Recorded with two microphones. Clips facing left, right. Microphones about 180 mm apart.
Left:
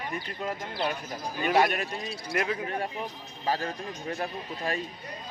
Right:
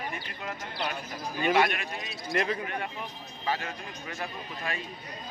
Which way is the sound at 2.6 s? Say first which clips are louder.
Left 3 dB; 30° left (ahead or behind).